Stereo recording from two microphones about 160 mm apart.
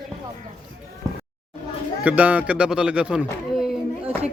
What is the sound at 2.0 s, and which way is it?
Speech, 10° right (ahead or behind).